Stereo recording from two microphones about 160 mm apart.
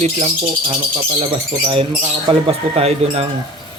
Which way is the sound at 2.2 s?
35° right (ahead or behind).